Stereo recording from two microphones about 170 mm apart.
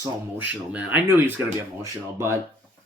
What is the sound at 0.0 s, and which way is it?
Speech, 10° right (ahead or behind).